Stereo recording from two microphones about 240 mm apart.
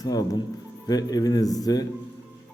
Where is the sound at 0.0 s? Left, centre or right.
Centre.